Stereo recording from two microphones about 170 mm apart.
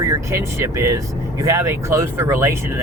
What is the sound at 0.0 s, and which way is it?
Speech, 15° right (ahead or behind).